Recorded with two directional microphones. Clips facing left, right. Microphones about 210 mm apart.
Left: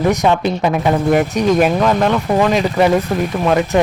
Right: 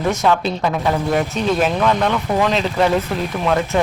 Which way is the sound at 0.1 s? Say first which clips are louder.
Left 3 dB; 15° left (ahead or behind).